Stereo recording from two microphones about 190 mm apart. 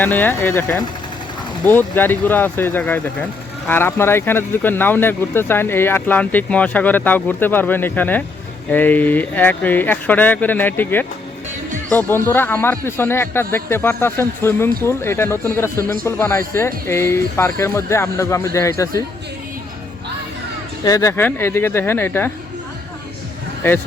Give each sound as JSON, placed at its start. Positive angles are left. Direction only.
{"t": 0.0, "sound": "speech", "side_deg": 10}
{"t": 20.8, "sound": "speech", "side_deg": 15}
{"t": 23.6, "sound": "speech", "side_deg": 10}